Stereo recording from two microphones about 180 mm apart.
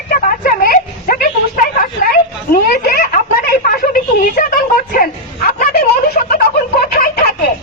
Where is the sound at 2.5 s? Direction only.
60° left (ahead or behind).